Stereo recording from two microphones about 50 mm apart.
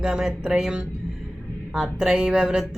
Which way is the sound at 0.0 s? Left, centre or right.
Centre.